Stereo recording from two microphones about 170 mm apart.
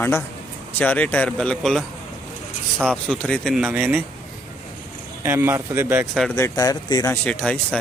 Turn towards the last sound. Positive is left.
turn(degrees=5)  # may be behind; listen again after turning